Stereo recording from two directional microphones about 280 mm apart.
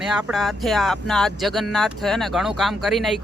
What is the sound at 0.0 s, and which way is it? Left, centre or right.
Speech, centre.